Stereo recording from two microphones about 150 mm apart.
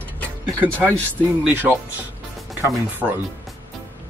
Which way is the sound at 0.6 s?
10° right (ahead or behind).